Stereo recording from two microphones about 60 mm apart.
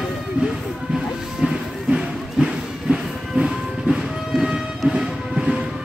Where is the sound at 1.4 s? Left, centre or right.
Centre.